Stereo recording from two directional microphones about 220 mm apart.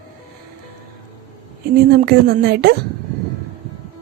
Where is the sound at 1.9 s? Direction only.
45° right (ahead or behind).